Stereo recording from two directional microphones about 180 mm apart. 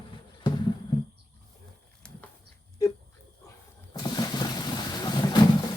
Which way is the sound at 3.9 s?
20° left (ahead or behind).